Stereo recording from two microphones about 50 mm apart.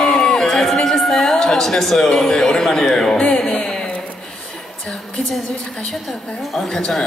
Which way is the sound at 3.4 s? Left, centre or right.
Left.